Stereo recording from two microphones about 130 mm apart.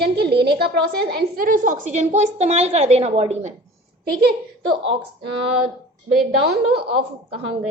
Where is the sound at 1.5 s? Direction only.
90° right; by 3.5 s 55° right (ahead or behind).